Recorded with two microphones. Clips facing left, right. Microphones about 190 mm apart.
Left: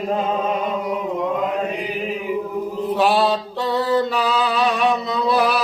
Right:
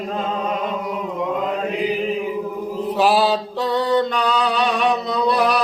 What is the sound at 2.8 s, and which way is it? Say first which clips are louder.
Mantra: right 1 dB; centre (ahead or behind).